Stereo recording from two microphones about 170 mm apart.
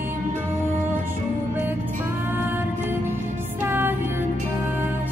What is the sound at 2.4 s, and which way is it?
Music, 10° right (ahead or behind).